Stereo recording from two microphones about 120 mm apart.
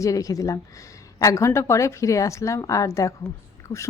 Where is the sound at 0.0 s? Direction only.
30° left (ahead or behind).